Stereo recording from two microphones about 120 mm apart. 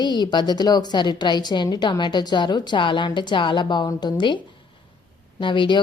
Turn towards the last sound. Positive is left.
turn(degrees=45)  # may be behind; listen again after turning